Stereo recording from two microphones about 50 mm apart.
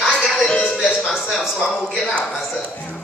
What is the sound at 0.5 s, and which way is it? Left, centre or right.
Music, left.